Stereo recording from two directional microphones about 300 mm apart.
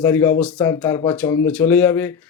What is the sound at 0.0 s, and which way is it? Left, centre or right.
Speech, centre.